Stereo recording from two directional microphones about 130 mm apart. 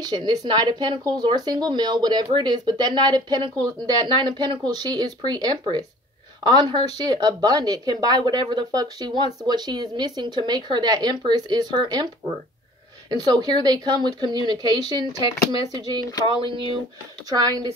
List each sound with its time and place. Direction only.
0.0 s speech: 30° right (ahead or behind)
13.1 s speech: 30° right (ahead or behind)
16.1 s speech: 30° left (ahead or behind)
17.3 s speech: 30° right (ahead or behind)